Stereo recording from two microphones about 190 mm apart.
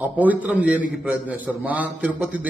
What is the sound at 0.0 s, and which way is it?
A man's voice, 10° right (ahead or behind).